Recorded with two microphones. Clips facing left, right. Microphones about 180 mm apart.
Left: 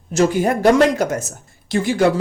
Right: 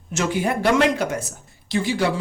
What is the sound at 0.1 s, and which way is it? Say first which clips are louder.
Speech: left 6 dB; 40° left (ahead or behind).